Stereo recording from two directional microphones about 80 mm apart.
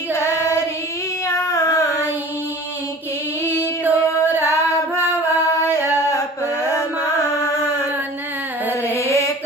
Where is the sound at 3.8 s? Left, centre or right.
Right.